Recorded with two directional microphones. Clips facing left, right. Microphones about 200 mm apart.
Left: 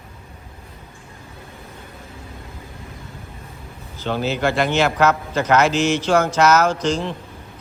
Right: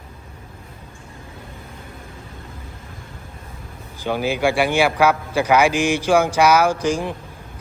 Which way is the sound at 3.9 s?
10° right (ahead or behind).